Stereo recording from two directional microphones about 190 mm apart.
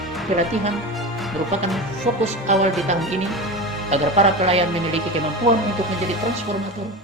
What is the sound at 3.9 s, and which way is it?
A woman's voice, 35° right (ahead or behind).